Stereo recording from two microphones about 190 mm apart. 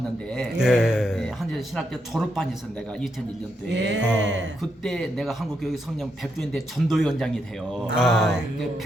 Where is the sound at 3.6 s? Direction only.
65° right (ahead or behind).